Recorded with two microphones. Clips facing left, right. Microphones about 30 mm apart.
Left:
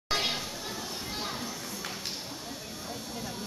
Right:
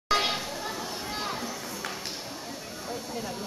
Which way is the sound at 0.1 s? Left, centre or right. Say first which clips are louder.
Right 4 dB; centre.